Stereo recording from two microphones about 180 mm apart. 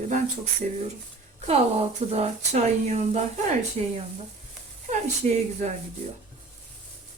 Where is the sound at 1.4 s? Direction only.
35° right (ahead or behind).